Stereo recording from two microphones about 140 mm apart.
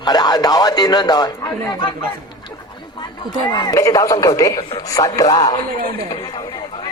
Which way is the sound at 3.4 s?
30° left (ahead or behind).